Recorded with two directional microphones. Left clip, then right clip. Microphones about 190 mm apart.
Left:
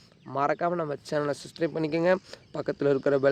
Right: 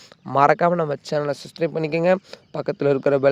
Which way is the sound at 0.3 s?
55° right (ahead or behind).